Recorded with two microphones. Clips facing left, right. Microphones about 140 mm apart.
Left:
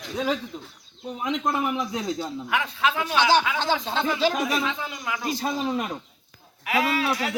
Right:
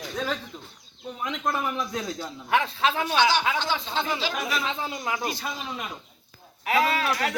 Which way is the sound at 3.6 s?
40° left (ahead or behind).